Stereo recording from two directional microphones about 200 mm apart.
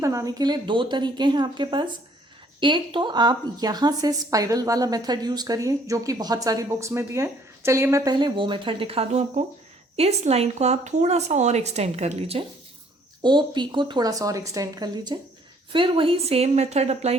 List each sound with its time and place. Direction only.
0.0 s a woman's voice: 15° right (ahead or behind); by 17.2 s 30° right (ahead or behind)